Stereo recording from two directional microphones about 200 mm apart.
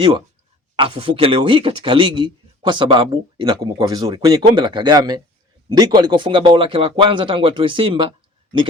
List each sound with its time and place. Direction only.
0.8 s speech: 25° right (ahead or behind)